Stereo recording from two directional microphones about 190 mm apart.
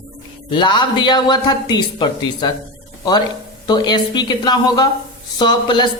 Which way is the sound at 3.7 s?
20° left (ahead or behind).